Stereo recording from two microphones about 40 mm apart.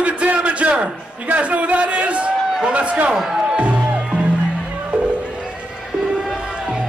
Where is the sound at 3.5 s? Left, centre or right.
Right.